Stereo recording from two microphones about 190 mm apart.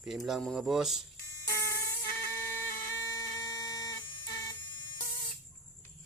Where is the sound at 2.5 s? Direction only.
15° left (ahead or behind).